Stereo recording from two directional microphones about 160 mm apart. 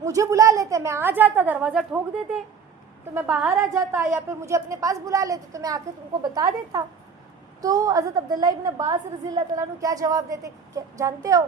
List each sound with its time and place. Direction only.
0.0 s a woman's voice: 20° right (ahead or behind); by 2.0 s 5° right (ahead or behind)
3.2 s a woman's voice: 5° right (ahead or behind)
3.6 s a woman's voice: 20° right (ahead or behind)